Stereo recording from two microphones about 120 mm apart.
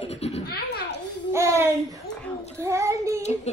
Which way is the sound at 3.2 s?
65° left (ahead or behind).